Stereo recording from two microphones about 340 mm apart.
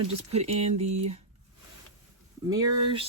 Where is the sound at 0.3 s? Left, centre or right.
Centre.